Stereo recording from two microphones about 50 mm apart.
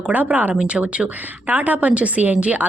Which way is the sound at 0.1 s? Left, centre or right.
Right.